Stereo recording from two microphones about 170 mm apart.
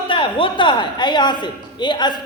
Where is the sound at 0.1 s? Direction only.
30° left (ahead or behind).